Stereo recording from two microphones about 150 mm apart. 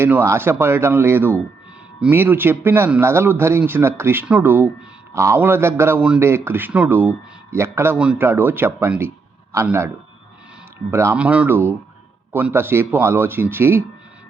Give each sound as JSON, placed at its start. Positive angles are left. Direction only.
{"t": 0.0, "sound": "a man's voice", "side_deg": -15}
{"t": 10.9, "sound": "a man's voice", "side_deg": -15}